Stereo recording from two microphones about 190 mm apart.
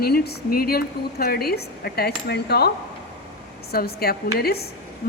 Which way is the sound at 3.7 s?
55° left (ahead or behind).